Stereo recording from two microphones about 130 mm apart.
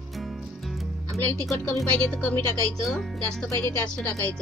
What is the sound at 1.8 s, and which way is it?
Speech, 5° left (ahead or behind).